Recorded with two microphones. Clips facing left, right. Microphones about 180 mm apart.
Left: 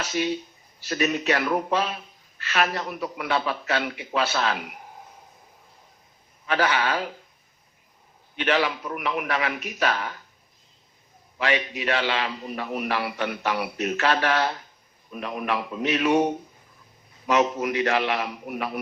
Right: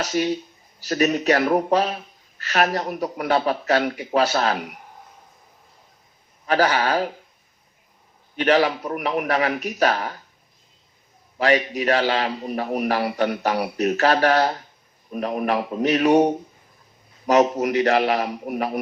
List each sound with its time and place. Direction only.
0.0 s a man's voice: 40° right (ahead or behind)
6.4 s a man's voice: 40° right (ahead or behind)
8.4 s a man's voice: 40° right (ahead or behind)
11.3 s a man's voice: 40° right (ahead or behind)